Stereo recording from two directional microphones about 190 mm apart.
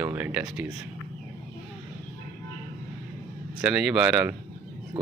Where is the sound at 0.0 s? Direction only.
10° right (ahead or behind).